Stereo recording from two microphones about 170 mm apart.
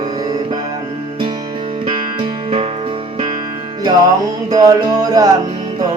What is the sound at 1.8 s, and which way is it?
Music, 30° right (ahead or behind).